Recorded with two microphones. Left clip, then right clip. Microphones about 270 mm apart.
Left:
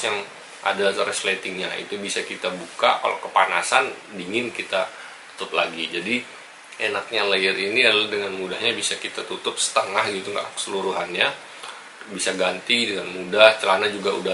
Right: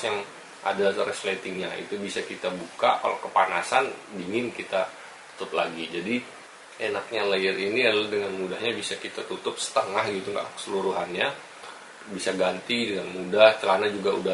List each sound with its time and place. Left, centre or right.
0.7 s speech: centre
10.7 s speech: right
11.0 s speech: centre